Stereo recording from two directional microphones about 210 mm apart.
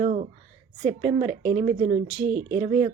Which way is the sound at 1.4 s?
40° right (ahead or behind).